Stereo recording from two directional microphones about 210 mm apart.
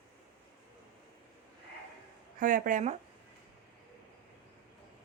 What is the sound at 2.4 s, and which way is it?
Speech, 40° right (ahead or behind).